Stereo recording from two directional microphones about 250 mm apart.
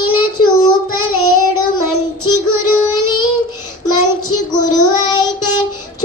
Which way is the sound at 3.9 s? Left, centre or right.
Centre.